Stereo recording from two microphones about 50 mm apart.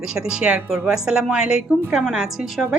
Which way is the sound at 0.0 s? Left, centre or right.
Centre.